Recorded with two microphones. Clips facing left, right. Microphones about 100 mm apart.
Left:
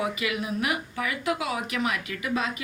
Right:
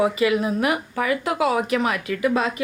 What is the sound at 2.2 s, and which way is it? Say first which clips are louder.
Speech: right 8 dB; 85° right.